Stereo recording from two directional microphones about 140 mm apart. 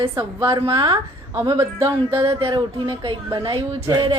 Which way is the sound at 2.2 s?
35° right (ahead or behind).